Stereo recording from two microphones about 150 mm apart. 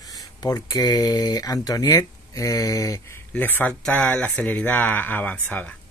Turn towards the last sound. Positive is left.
turn(degrees=10)  # may be behind; listen again after turning